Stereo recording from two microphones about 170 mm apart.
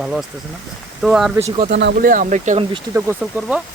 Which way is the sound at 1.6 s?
90° right.